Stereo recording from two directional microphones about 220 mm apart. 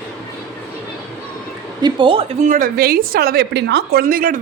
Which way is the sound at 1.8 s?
20° right (ahead or behind).